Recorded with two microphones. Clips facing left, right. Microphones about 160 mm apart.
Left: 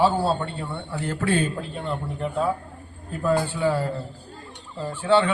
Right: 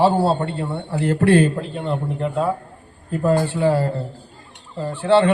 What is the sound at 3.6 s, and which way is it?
Speech, 30° right (ahead or behind).